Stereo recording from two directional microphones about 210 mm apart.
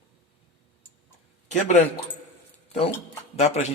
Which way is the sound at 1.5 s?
35° left (ahead or behind).